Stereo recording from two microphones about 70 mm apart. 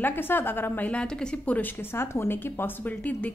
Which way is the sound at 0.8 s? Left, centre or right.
Centre.